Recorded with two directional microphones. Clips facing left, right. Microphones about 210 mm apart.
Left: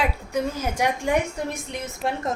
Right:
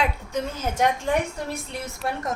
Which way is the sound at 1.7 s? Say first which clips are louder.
Left 2 dB; 25° left (ahead or behind).